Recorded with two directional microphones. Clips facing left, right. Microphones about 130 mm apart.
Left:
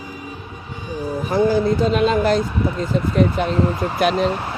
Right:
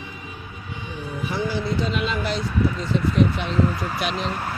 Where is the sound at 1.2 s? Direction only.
45° left (ahead or behind).